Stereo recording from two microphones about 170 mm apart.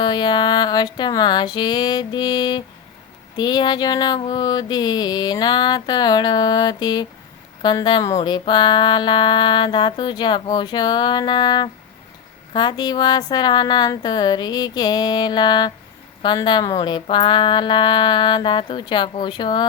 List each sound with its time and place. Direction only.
0.0 s speech: 25° left (ahead or behind)